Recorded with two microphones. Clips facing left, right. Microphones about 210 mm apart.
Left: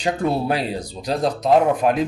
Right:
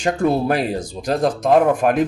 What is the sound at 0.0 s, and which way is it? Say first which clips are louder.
Speech: right 3 dB; 50° right (ahead or behind).